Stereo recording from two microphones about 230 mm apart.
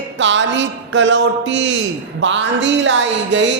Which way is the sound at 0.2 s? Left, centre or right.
Right.